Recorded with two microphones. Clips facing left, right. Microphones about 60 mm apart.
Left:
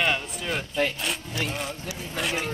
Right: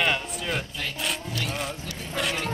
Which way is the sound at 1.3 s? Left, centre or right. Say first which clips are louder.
Left 1 dB; left.